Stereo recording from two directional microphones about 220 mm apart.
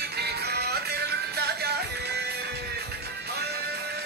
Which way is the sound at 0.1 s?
45° right (ahead or behind).